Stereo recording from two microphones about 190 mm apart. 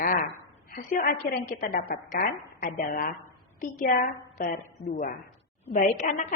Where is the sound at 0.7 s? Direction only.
50° left (ahead or behind).